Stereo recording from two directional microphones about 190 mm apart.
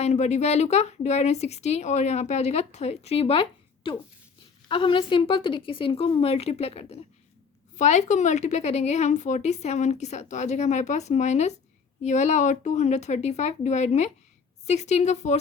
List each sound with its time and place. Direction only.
0.0 s a woman's voice: 35° left (ahead or behind)